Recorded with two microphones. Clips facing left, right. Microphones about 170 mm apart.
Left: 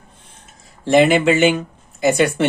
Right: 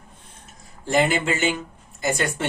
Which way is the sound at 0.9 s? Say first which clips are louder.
Left 8 dB; 80° left.